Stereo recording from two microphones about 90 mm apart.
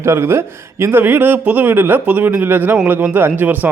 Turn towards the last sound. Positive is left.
turn(degrees=-20)  # may be behind; listen again after turning